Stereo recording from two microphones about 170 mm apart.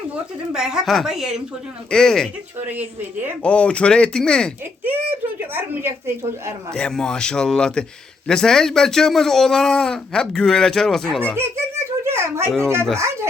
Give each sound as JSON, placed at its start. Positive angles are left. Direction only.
{"t": 0.5, "sound": "speech", "side_deg": -5}
{"t": 2.6, "sound": "a woman's voice", "side_deg": -10}
{"t": 3.4, "sound": "speech", "side_deg": 5}
{"t": 5.5, "sound": "a woman's voice", "side_deg": -15}
{"t": 6.7, "sound": "speech", "side_deg": 5}
{"t": 11.3, "sound": "giggle", "side_deg": -15}
{"t": 12.6, "sound": "a woman's voice", "side_deg": -15}